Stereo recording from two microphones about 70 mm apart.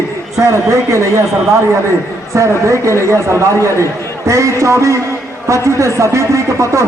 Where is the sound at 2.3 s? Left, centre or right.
Right.